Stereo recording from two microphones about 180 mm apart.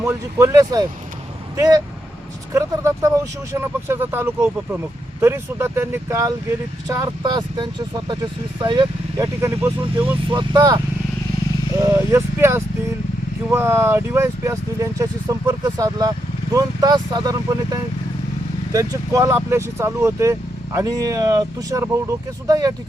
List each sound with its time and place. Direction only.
0.0 s speech: 15° right (ahead or behind)
10.3 s speech: 20° right (ahead or behind)
11.8 s speech: 15° right (ahead or behind)